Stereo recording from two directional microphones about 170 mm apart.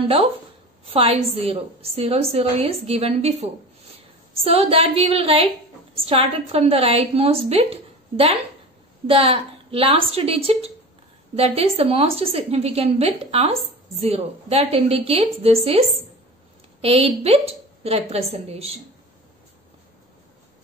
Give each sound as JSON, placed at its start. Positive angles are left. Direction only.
{"t": 0.8, "sound": "a woman's voice", "side_deg": -35}
{"t": 16.8, "sound": "a woman's voice", "side_deg": -35}